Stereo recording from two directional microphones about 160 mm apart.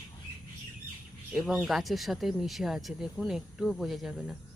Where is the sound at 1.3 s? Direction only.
Centre (ahead or behind).